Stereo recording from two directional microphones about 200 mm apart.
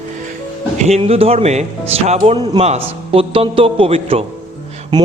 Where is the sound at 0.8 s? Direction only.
35° right (ahead or behind).